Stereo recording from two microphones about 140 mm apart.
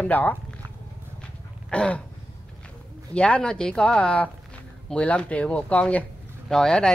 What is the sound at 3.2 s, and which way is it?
Speech, 5° left (ahead or behind).